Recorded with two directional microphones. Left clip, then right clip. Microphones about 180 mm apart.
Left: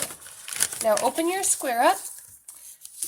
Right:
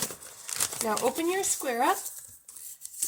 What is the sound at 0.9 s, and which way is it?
Speech, 50° left (ahead or behind).